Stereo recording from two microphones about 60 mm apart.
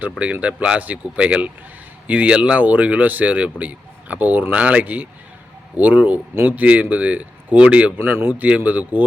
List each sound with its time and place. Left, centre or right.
0.2 s speech: right
7.9 s speech: right